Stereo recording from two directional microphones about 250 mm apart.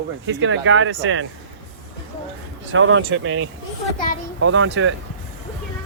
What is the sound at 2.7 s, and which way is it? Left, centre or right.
Speech, right.